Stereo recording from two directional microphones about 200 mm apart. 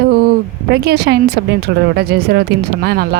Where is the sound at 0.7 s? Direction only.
55° right (ahead or behind).